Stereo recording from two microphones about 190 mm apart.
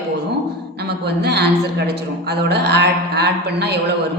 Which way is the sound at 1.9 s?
60° right (ahead or behind).